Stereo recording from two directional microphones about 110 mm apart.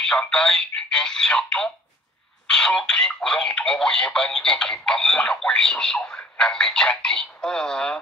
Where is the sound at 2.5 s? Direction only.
5° left (ahead or behind).